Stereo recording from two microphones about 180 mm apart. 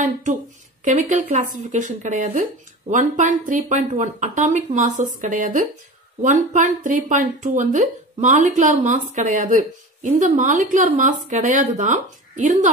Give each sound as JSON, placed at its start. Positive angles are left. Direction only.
{"t": 0.0, "sound": "speech", "side_deg": -45}